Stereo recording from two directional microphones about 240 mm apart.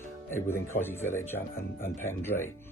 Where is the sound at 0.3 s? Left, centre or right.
Centre.